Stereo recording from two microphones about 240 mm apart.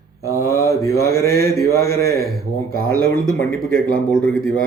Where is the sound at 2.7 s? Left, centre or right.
Left.